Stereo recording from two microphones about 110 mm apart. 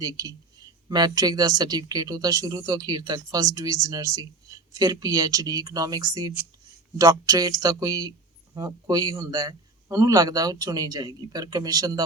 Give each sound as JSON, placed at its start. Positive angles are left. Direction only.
{"t": 0.0, "sound": "speech", "side_deg": -35}